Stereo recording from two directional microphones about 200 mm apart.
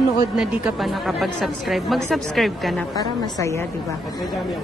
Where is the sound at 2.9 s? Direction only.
20° left (ahead or behind).